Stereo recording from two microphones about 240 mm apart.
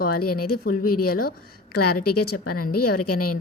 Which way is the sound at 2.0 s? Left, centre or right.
Left.